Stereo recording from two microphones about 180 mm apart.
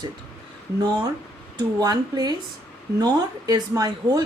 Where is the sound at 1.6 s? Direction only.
20° right (ahead or behind).